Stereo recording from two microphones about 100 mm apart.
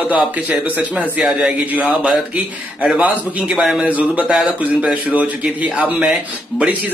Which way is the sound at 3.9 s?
15° right (ahead or behind).